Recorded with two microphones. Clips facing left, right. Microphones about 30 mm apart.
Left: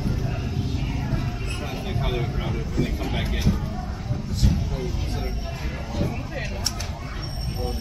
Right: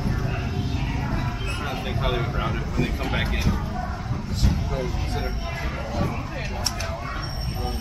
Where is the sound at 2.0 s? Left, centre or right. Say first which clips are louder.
Right 3 dB; centre.